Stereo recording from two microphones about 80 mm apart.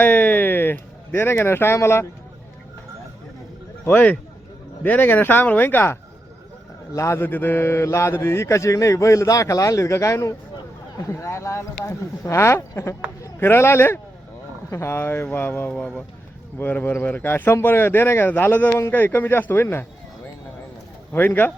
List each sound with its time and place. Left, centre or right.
0.0 s a sound: left
3.8 s speech: left
6.9 s speech: left
7.2 s speech: left
21.1 s speech: left